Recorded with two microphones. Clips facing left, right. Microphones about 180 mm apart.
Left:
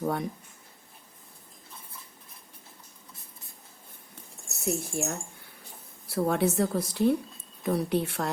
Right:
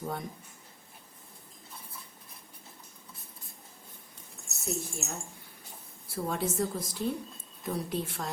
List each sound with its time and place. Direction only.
0.0 s a woman's voice: 70° left (ahead or behind)
4.6 s a woman's voice: 65° left (ahead or behind)